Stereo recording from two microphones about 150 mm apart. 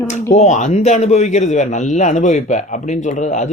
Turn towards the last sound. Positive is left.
turn(degrees=55)  # may be behind; listen again after turning